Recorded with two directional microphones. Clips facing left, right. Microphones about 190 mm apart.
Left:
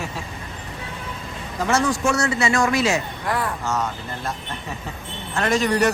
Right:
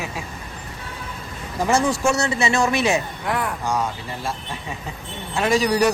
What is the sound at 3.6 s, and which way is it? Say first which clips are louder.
Speech: right 1 dB; 10° right (ahead or behind).